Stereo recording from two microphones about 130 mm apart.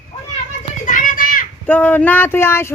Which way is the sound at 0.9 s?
90° left.